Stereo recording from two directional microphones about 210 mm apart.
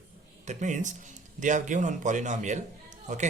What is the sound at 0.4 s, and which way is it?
Speech, 35° right (ahead or behind).